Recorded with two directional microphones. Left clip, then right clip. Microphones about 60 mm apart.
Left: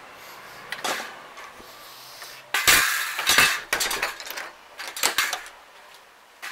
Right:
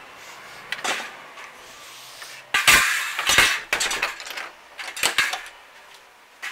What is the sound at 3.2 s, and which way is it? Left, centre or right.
Cutlery, centre.